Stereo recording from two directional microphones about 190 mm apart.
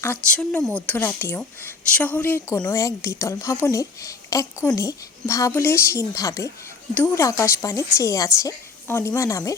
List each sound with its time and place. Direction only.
0.0 s a woman's voice: 10° left (ahead or behind)